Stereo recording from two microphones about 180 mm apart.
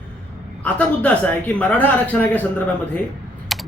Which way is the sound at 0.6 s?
10° left (ahead or behind).